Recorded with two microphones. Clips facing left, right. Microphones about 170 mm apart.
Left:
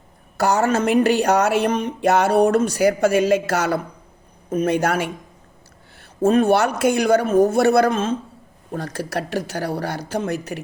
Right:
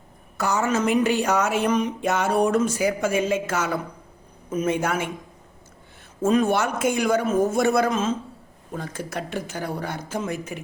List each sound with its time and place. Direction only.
0.3 s speech: 70° left (ahead or behind)
4.4 s speech: 60° left (ahead or behind); by 4.9 s 75° left (ahead or behind)
6.0 s a sound: 60° left (ahead or behind)
6.6 s speech: 70° left (ahead or behind)
8.7 s speech: 75° left (ahead or behind)